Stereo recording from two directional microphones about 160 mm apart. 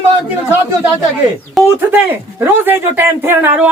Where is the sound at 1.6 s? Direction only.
15° right (ahead or behind).